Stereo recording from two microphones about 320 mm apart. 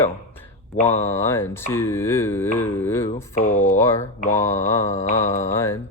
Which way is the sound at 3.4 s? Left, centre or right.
Left.